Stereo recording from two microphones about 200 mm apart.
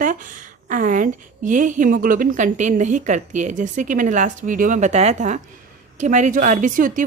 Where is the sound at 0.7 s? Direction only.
40° right (ahead or behind).